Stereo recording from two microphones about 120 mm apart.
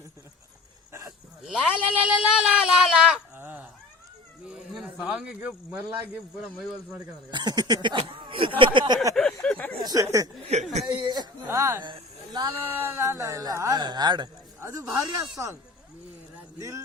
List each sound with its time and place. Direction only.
1.4 s speech: 5° right (ahead or behind)
3.3 s cat: 15° right (ahead or behind)
4.4 s speech: 5° right (ahead or behind)
7.3 s speech: 35° right (ahead or behind)
9.1 s speech: 5° left (ahead or behind)
9.8 s speech: 30° right (ahead or behind)
10.5 s speech: 70° right (ahead or behind)
10.8 s speech: 35° right (ahead or behind)
11.4 s speech: 25° right (ahead or behind)
11.8 s speech: 40° right (ahead or behind)
12.6 s speech: 20° right (ahead or behind)
14.6 s speech: 25° right (ahead or behind)
16.6 s speech: 25° right (ahead or behind)